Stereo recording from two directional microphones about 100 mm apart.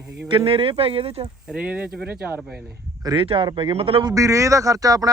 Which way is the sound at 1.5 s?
10° right (ahead or behind).